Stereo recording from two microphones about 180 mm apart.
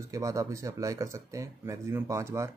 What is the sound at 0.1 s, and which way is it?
Speech, 20° right (ahead or behind).